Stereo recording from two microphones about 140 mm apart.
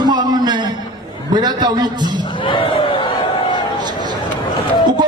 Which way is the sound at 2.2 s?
35° left (ahead or behind).